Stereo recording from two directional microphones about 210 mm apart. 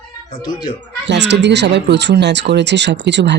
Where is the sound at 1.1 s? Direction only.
55° right (ahead or behind).